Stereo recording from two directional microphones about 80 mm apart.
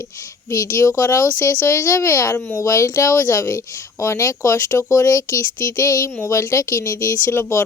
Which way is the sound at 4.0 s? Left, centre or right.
Left.